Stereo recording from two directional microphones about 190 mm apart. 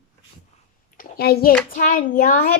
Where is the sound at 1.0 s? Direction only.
55° left (ahead or behind).